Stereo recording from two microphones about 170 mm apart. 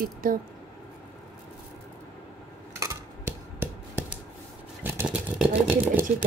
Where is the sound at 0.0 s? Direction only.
55° right (ahead or behind).